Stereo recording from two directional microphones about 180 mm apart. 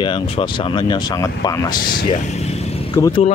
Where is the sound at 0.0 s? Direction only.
25° left (ahead or behind).